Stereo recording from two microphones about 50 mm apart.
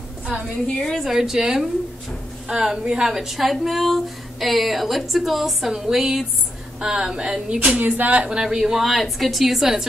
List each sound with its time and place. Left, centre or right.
0.7 s a woman's voice: centre
1.0 s a woman's voice: centre
7.8 s speech: right
8.2 s a woman's voice: centre